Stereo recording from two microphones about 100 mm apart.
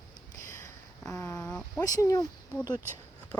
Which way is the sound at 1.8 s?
35° left (ahead or behind).